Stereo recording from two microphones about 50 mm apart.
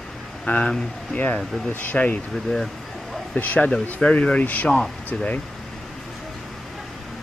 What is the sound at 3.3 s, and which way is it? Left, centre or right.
Speech, left.